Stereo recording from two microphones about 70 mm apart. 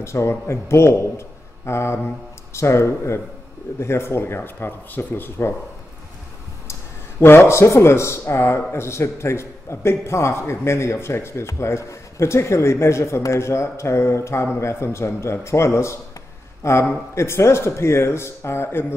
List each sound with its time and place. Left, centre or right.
0.0 s speech: left
6.7 s speech: left